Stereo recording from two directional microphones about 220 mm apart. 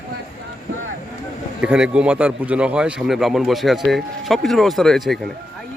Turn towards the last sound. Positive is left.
turn(degrees=0)  # may be behind; listen again after turning